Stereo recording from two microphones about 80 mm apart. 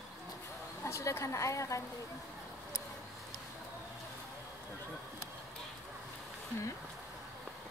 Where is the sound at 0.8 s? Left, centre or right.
Left.